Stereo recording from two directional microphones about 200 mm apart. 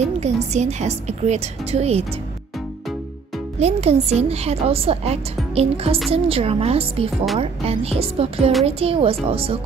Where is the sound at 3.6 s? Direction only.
30° right (ahead or behind).